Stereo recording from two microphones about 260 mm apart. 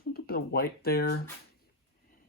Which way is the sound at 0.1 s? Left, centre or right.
Left.